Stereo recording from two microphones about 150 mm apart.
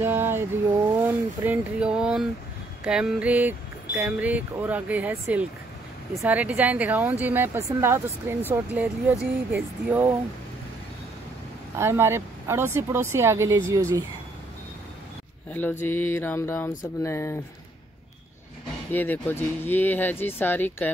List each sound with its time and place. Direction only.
0.0 s a sound: 15° right (ahead or behind)
1.0 s speech: 10° right (ahead or behind)
11.8 s speech: 15° right (ahead or behind)
15.8 s speech: 15° left (ahead or behind)
18.9 s speech: 10° left (ahead or behind)